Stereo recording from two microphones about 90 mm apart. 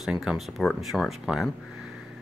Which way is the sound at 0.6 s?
Centre (ahead or behind).